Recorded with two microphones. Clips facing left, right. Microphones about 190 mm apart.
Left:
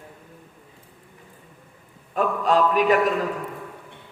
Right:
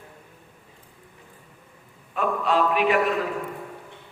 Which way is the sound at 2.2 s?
40° left (ahead or behind).